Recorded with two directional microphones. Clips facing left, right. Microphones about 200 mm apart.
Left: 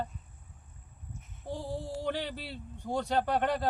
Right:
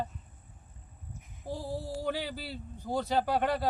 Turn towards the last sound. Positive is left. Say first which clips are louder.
# even
turn(degrees=-5)  # may be behind; listen again after turning